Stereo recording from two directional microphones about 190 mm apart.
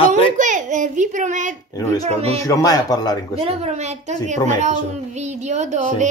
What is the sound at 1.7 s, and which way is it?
Speech, 20° left (ahead or behind).